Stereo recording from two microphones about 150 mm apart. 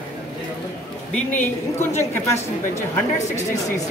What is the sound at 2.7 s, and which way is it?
Speech, 50° left (ahead or behind).